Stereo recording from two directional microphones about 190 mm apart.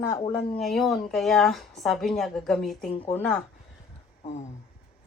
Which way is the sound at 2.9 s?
30° left (ahead or behind).